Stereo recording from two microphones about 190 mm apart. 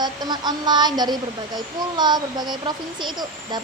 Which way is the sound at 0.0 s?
20° right (ahead or behind).